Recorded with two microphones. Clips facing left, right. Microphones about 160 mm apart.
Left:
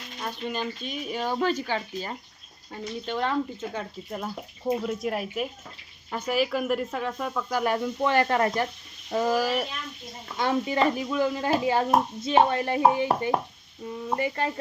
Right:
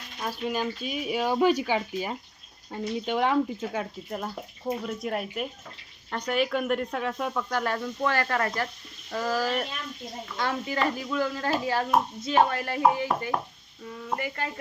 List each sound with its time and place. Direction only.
0.2 s speech: 5° right (ahead or behind)
7.6 s speech: 15° left (ahead or behind)
9.0 s a sound: 20° left (ahead or behind)
10.3 s speech: 20° left (ahead or behind)